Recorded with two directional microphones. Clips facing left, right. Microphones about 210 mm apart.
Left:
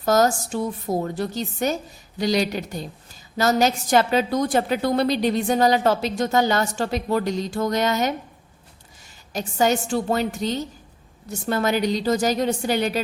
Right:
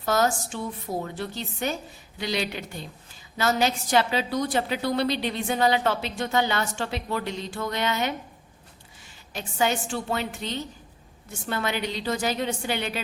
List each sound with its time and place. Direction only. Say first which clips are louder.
0.0 s a woman's voice: left 5 dB; 40° left (ahead or behind)
9.3 s a woman's voice: left 5 dB; 40° left (ahead or behind)